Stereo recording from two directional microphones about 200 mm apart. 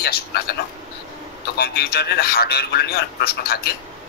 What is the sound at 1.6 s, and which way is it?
A man's voice, 55° left (ahead or behind).